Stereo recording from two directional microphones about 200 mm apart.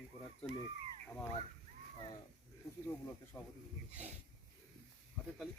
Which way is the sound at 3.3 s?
20° left (ahead or behind).